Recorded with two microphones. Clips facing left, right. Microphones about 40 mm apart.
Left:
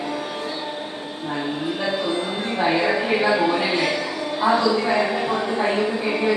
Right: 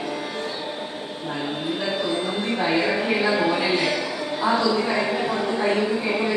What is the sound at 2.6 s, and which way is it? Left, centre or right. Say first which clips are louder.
A woman's voice: left 3 dB; centre.